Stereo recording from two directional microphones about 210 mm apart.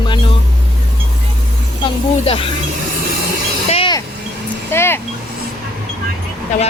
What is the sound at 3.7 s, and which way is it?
Vehicle, 25° left (ahead or behind).